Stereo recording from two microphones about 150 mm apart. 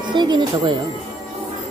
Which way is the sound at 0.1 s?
30° right (ahead or behind).